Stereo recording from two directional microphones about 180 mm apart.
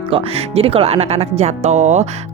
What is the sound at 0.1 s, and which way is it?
A woman's voice, 35° right (ahead or behind).